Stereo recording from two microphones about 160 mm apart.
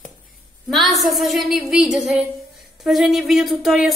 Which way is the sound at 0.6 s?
Centre (ahead or behind).